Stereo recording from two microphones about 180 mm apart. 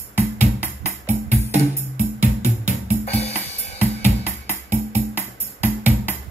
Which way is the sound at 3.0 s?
35° left (ahead or behind).